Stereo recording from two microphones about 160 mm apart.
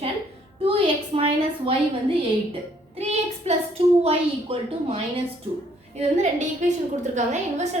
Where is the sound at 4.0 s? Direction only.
40° right (ahead or behind).